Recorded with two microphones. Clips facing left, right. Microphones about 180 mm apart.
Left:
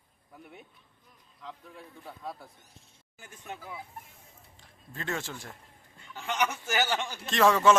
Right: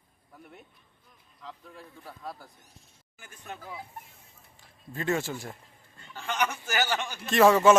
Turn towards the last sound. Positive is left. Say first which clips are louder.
# right 3 dB
turn(degrees=-5)  # may be behind; listen again after turning